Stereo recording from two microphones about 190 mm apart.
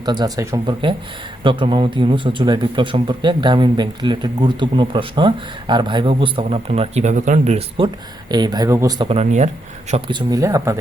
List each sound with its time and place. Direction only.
0.0 s speech: 20° right (ahead or behind)
8.3 s speech: 20° right (ahead or behind); by 9.5 s 40° right (ahead or behind)
10.1 s speech: 25° right (ahead or behind)